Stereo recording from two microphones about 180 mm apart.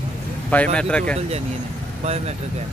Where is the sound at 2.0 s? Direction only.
35° right (ahead or behind).